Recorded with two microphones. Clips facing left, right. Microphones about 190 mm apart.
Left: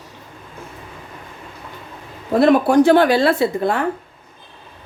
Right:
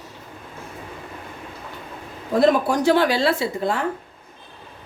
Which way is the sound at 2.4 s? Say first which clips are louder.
Left 5 dB; 60° left (ahead or behind).